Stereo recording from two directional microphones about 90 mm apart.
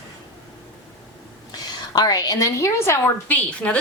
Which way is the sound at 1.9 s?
45° left (ahead or behind).